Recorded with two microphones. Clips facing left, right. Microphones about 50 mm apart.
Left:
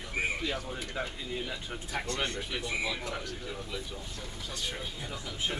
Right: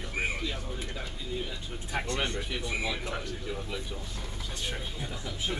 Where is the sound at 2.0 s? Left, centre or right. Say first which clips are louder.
Right 1 dB; right.